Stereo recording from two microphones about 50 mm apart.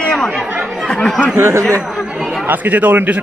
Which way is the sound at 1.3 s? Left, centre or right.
Right.